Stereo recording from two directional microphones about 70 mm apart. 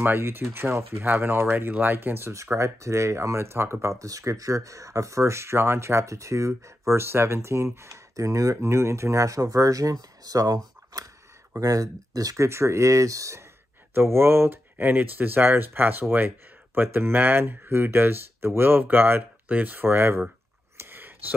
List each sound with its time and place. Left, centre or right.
0.0 s speech: right
1.0 s speech: right
3.8 s speech: right
12.4 s speech: right
13.9 s speech: right
20.7 s a sound: right